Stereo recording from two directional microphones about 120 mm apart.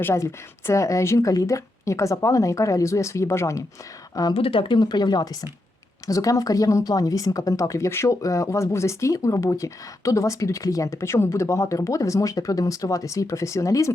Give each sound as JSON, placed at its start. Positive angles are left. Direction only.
{"t": 0.0, "sound": "speech", "side_deg": 25}
{"t": 4.4, "sound": "speech", "side_deg": 50}